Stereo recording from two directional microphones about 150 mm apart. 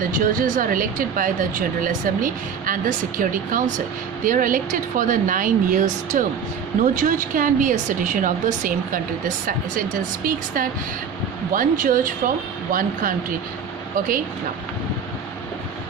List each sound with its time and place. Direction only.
0.0 s speech: 65° right (ahead or behind)